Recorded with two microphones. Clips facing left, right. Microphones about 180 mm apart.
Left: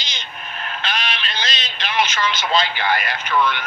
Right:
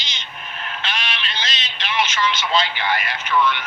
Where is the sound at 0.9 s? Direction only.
40° left (ahead or behind).